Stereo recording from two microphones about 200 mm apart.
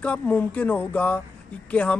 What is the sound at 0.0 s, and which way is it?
A man's voice, 5° left (ahead or behind).